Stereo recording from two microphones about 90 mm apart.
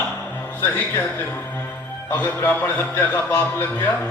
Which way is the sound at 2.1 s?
25° left (ahead or behind).